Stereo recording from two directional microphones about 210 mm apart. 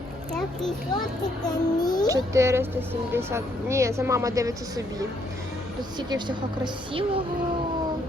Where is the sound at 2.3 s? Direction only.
15° right (ahead or behind).